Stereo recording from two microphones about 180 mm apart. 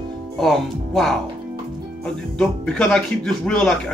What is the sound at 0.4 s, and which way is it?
Speech, centre (ahead or behind).